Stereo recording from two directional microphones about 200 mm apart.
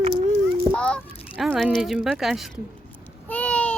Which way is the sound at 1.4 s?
Centre (ahead or behind).